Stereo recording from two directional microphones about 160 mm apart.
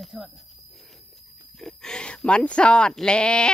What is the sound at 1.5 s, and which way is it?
Speech, 5° left (ahead or behind).